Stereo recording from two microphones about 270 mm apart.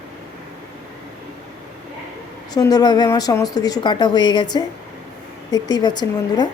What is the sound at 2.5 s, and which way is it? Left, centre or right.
Speech, centre.